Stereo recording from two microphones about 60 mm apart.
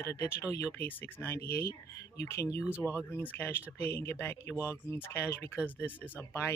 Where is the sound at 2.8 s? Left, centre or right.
Left.